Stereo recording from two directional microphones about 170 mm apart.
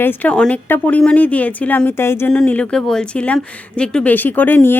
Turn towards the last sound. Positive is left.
turn(degrees=10)  # may be behind; listen again after turning